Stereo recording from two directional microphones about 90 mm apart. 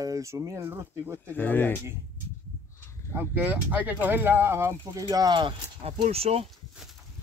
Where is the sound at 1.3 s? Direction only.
20° left (ahead or behind).